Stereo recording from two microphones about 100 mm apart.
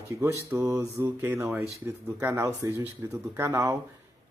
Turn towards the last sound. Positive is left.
turn(degrees=-25)  # may be behind; listen again after turning